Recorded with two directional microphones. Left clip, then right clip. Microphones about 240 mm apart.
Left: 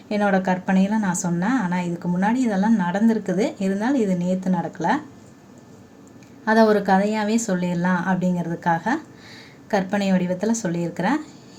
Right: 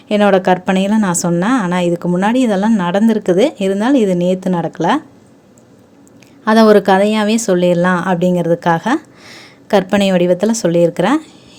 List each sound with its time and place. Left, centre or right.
0.1 s a woman's voice: right
6.4 s a woman's voice: right